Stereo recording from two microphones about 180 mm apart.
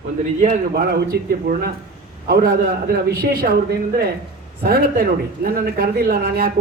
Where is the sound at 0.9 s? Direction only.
60° right (ahead or behind).